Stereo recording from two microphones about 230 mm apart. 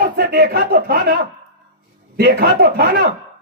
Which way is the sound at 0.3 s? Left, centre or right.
Right.